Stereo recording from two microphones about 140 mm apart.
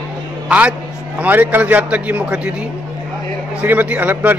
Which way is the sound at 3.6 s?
10° right (ahead or behind).